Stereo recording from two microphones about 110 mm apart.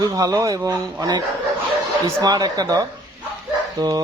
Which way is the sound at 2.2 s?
35° right (ahead or behind).